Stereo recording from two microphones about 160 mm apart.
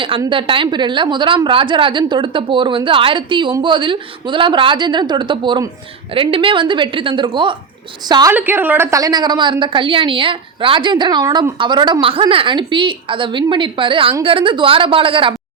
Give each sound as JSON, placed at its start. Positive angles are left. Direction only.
{"t": 0.3, "sound": "a woman's voice", "side_deg": -35}
{"t": 8.3, "sound": "a woman's voice", "side_deg": -15}